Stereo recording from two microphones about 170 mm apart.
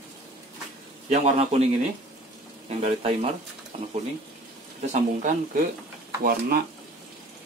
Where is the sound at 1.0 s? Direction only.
40° right (ahead or behind).